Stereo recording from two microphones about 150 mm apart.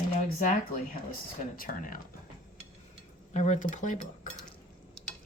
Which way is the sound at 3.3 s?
55° left (ahead or behind).